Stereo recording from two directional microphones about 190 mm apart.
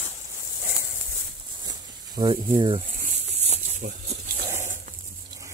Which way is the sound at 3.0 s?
40° right (ahead or behind).